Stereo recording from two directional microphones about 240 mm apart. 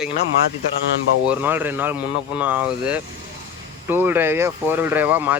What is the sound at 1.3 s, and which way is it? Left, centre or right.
Speech, centre.